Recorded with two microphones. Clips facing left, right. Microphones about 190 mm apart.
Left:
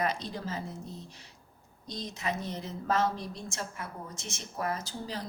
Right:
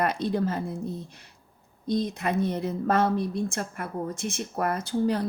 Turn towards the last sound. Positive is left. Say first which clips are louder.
# right 11 dB
turn(degrees=-60)  # may be behind; listen again after turning